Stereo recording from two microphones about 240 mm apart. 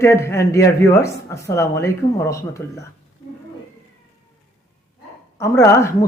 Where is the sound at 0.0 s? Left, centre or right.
Centre.